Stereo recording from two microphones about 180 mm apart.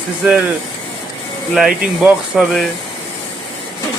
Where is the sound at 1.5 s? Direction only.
Centre (ahead or behind).